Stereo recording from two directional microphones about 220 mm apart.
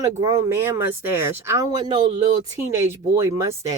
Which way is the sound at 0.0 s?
20° right (ahead or behind).